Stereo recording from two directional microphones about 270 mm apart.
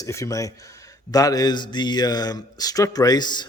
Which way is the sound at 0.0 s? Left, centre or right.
Centre.